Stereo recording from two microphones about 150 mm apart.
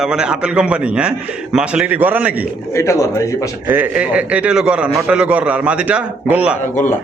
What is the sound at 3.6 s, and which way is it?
Speech, 10° right (ahead or behind).